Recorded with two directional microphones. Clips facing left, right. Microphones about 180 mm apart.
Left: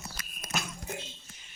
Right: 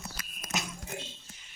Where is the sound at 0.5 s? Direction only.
20° right (ahead or behind).